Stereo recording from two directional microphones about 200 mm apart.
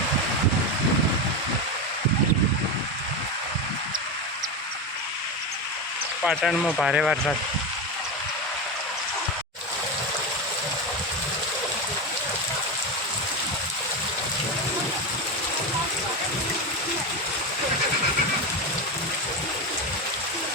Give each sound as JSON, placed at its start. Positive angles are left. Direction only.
{"t": 6.2, "sound": "speech", "side_deg": 0}